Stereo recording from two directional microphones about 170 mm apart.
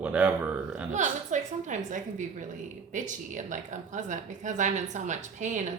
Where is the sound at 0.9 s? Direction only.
45° right (ahead or behind).